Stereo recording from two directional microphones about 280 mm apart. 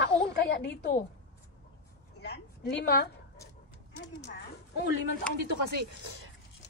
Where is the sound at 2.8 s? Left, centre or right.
Left.